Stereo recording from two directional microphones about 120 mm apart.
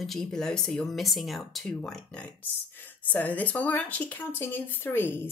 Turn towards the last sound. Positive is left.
turn(degrees=15)  # may be behind; listen again after turning